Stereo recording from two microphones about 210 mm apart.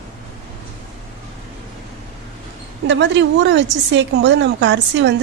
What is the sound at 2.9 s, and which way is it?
A woman's voice, 60° right (ahead or behind).